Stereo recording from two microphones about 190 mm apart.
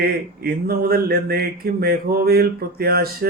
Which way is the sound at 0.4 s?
55° right (ahead or behind).